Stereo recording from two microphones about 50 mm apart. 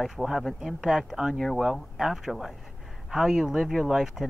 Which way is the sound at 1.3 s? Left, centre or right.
Centre.